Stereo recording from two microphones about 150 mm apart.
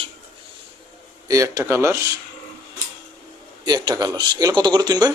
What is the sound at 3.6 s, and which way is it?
A man's voice, 30° right (ahead or behind).